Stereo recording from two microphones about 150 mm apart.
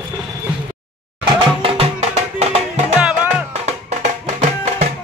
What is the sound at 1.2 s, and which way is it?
Music, 40° right (ahead or behind).